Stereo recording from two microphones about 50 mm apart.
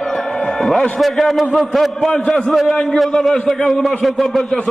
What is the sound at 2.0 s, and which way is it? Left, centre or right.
A man's voice, centre.